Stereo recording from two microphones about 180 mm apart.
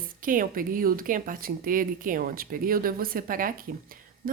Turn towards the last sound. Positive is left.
turn(degrees=-50)  # may be behind; listen again after turning